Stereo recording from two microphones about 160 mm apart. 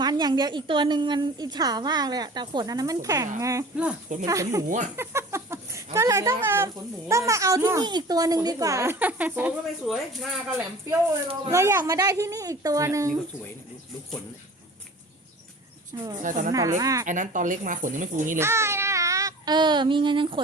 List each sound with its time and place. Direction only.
0.0 s a child's voice: 25° right (ahead or behind); by 10.4 s centre (ahead or behind)
11.5 s a child's voice: 15° right (ahead or behind)
16.0 s a child's voice: 20° right (ahead or behind)
16.2 s speech: 55° right (ahead or behind)
16.5 s a child's voice: 20° right (ahead or behind)
17.1 s speech: 55° right (ahead or behind)
18.3 s child singing: 15° right (ahead or behind); by 20.4 s 30° right (ahead or behind)